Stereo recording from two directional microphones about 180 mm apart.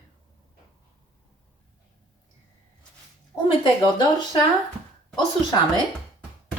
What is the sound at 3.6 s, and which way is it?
Speech, 25° left (ahead or behind).